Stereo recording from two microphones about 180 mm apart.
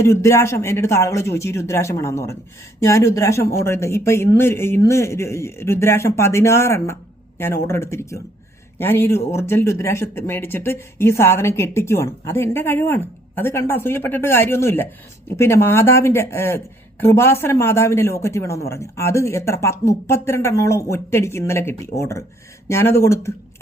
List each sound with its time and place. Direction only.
0.0 s speech: 15° left (ahead or behind)